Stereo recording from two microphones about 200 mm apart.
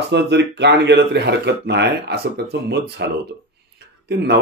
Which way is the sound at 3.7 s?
55° right (ahead or behind).